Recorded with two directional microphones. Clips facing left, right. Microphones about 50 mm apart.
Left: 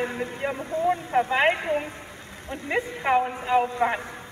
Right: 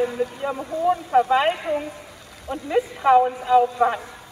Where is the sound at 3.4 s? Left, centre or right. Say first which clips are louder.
Right 5 dB; left.